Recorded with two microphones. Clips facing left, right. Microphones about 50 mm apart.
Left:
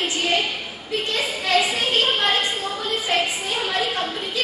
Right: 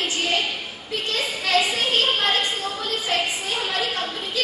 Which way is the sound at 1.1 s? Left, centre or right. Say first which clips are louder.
Left 1 dB; centre.